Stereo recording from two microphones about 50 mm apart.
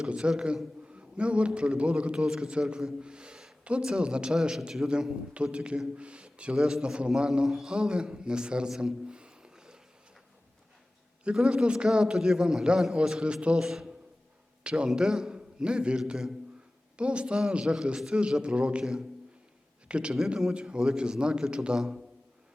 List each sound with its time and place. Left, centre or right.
0.0 s a man's voice: centre
8.8 s a sound: centre
11.2 s a man's voice: centre
21.8 s a man's voice: centre